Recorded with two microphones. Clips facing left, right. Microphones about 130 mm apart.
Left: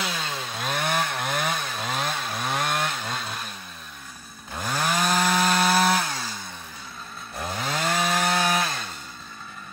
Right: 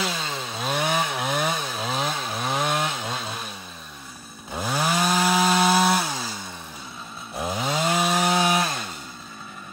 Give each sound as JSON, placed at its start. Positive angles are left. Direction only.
{"t": 0.0, "sound": "chainsaw", "side_deg": 0}
{"t": 4.5, "sound": "wood", "side_deg": -5}
{"t": 7.3, "sound": "chainsaw", "side_deg": -5}